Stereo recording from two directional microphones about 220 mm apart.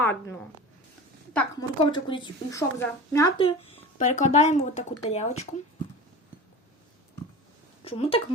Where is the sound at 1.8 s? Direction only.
20° left (ahead or behind).